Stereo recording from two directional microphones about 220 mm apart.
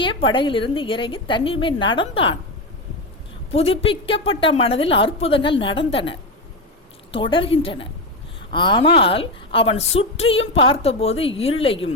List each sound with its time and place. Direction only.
0.0 s a woman's voice: 20° left (ahead or behind)
3.5 s a woman's voice: 25° left (ahead or behind)